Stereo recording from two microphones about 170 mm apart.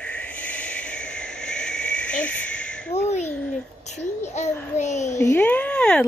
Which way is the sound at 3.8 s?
40° left (ahead or behind).